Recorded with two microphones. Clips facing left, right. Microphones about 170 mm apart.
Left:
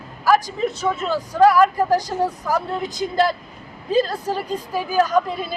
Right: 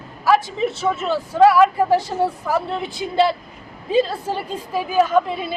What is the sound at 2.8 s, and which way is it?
Speech, 30° right (ahead or behind).